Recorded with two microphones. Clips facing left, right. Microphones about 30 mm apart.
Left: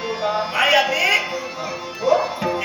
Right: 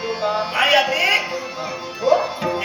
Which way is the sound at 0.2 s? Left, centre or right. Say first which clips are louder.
Even; centre.